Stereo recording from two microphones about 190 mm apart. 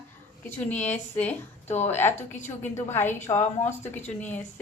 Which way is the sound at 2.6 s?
10° left (ahead or behind).